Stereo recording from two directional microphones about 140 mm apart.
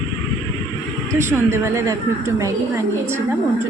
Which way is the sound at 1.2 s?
20° right (ahead or behind).